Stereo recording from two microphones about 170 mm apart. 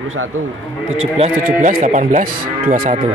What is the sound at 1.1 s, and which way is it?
Speech, 35° right (ahead or behind).